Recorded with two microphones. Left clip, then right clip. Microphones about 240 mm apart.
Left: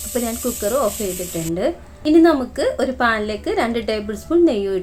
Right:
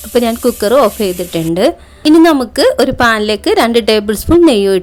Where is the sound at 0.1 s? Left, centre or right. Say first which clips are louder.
Right 12 dB; right.